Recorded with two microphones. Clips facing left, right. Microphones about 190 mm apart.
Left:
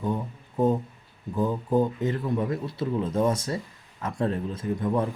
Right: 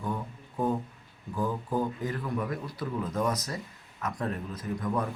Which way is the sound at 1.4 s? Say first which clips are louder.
Left 6 dB; 20° left (ahead or behind).